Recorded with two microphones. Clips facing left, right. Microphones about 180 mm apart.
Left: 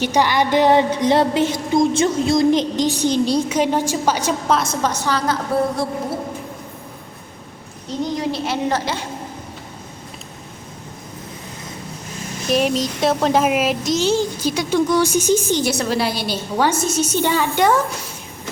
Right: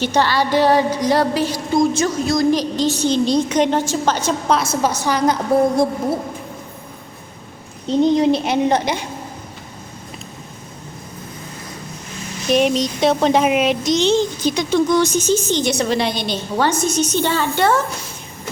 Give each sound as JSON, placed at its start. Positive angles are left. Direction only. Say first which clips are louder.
{"t": 0.0, "sound": "a sound", "louder": "even", "side_deg": 15}
{"t": 4.5, "sound": "a woman's voice", "louder": "right 1 dB", "side_deg": -5}
{"t": 7.9, "sound": "a woman's voice", "louder": "right 8 dB", "side_deg": -25}
{"t": 12.5, "sound": "a child's voice", "louder": "right 2 dB", "side_deg": 0}